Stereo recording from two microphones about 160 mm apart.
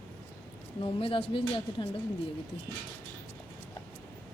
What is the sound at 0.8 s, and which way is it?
A woman's voice, 35° left (ahead or behind).